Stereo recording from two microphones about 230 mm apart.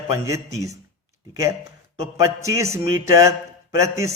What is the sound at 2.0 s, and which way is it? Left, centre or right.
A man's voice, centre.